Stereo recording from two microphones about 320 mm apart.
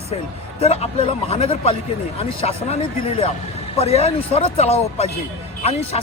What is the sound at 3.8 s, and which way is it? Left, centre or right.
Speech, centre.